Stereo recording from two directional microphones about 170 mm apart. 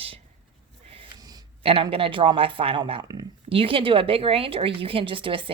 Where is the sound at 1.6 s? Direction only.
35° right (ahead or behind).